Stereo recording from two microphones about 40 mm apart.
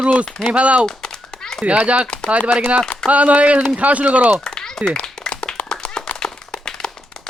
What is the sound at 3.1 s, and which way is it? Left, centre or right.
Speech, right.